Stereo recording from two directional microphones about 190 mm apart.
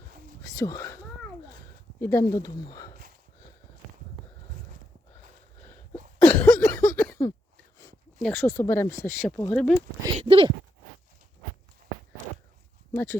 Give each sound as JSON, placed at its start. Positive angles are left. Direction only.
{"t": 0.5, "sound": "speech", "side_deg": 15}
{"t": 2.0, "sound": "speech", "side_deg": 15}
{"t": 6.2, "sound": "a sound", "side_deg": 15}
{"t": 8.4, "sound": "speech", "side_deg": 15}
{"t": 10.2, "sound": "speech", "side_deg": -30}
{"t": 12.9, "sound": "speech", "side_deg": 10}